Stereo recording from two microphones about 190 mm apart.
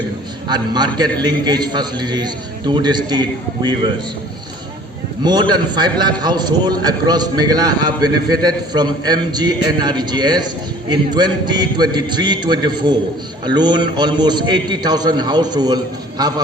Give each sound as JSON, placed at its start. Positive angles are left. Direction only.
{"t": 0.4, "sound": "a man's voice", "side_deg": -20}
{"t": 5.2, "sound": "a man's voice", "side_deg": -20}